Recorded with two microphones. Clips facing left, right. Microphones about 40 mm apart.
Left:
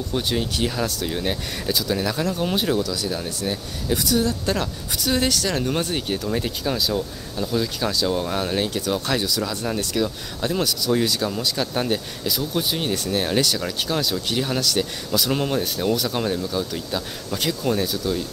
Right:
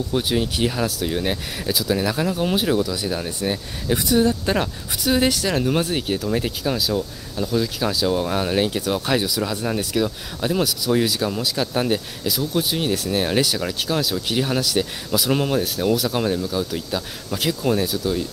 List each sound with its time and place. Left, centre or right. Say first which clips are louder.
0.1 s speech: right 1 dB; centre
2.8 s speech: right 2 dB; centre
5.0 s speech: right 3 dB; centre